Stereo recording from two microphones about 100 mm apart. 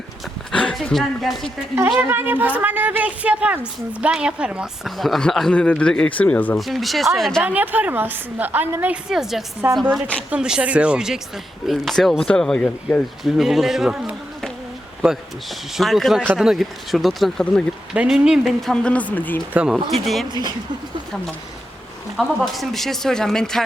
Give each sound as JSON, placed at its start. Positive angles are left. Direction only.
{"t": 0.5, "sound": "speech", "side_deg": 10}
{"t": 2.0, "sound": "speech", "side_deg": -20}
{"t": 6.6, "sound": "speech", "side_deg": 0}
{"t": 7.4, "sound": "a woman's voice", "side_deg": -15}
{"t": 9.0, "sound": "speech", "side_deg": -5}
{"t": 9.6, "sound": "a woman's voice", "side_deg": -20}
{"t": 10.2, "sound": "speech", "side_deg": -10}
{"t": 13.2, "sound": "speech", "side_deg": 0}
{"t": 17.9, "sound": "speech", "side_deg": -10}
{"t": 18.7, "sound": "speech", "side_deg": 10}
{"t": 19.5, "sound": "speech", "side_deg": -5}
{"t": 22.1, "sound": "speech", "side_deg": -5}